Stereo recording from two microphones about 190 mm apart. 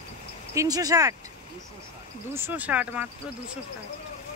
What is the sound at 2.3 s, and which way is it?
Speech, 10° right (ahead or behind).